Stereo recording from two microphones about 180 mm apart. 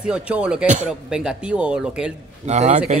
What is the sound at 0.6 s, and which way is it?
Speech, 40° right (ahead or behind).